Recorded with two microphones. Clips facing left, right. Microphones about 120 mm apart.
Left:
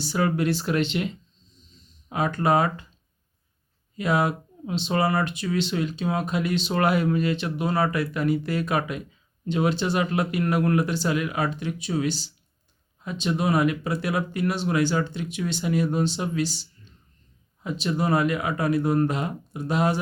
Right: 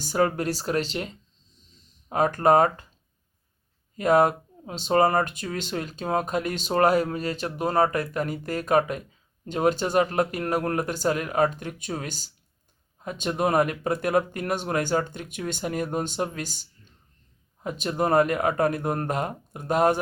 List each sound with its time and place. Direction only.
0.0 s speech: 45° right (ahead or behind)
3.9 s speech: 45° right (ahead or behind)